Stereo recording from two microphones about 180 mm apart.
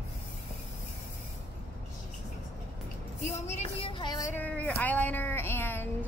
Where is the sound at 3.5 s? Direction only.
35° left (ahead or behind); by 6.1 s 10° left (ahead or behind).